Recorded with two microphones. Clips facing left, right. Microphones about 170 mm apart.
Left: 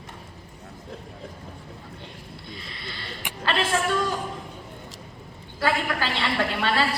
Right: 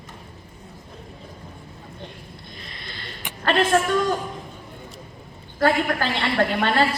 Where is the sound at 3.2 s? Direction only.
10° left (ahead or behind).